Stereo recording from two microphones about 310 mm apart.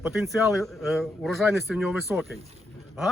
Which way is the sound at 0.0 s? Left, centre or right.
Centre.